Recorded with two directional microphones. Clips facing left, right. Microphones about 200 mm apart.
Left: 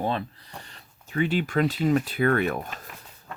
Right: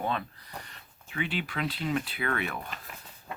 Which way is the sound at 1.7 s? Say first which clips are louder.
Left 8 dB; 45° left (ahead or behind).